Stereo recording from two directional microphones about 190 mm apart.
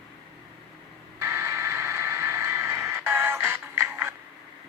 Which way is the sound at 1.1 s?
15° right (ahead or behind).